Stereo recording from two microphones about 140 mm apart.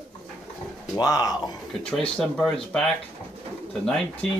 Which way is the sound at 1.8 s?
5° left (ahead or behind).